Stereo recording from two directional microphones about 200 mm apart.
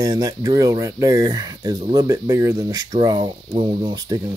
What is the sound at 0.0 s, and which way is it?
Speech, 20° right (ahead or behind).